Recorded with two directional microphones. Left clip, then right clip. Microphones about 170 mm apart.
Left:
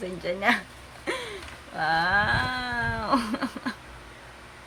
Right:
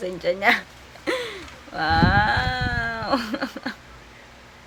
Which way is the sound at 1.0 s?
35° right (ahead or behind).